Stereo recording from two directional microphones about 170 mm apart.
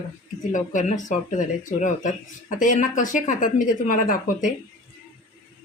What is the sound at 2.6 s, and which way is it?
Speech, 50° left (ahead or behind).